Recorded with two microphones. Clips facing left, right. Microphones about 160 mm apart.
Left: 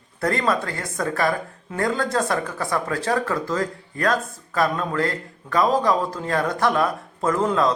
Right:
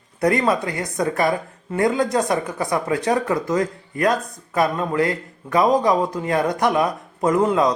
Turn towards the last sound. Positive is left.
turn(degrees=-15)  # may be behind; listen again after turning